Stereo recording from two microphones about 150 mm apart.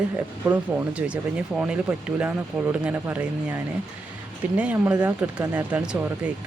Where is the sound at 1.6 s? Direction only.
5° right (ahead or behind).